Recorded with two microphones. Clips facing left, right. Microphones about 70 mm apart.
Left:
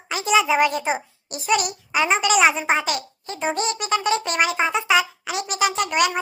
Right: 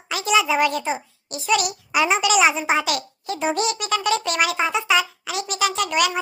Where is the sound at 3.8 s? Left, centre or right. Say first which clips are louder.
Even; left.